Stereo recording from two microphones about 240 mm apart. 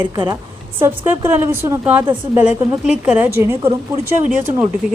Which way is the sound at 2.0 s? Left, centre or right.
Centre.